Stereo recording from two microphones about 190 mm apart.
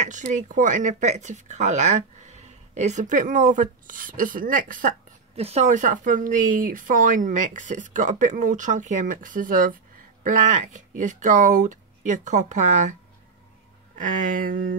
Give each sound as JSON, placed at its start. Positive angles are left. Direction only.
{"t": 0.0, "sound": "speech", "side_deg": -40}
{"t": 5.3, "sound": "speech", "side_deg": -35}
{"t": 13.9, "sound": "speech", "side_deg": -45}